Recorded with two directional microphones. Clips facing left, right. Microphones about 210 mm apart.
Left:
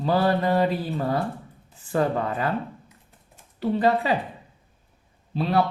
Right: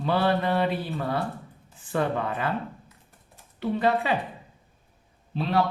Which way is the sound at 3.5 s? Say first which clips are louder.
Left 3 dB; 40° left (ahead or behind).